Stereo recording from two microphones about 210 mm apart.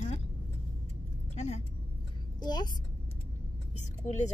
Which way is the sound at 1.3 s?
30° left (ahead or behind).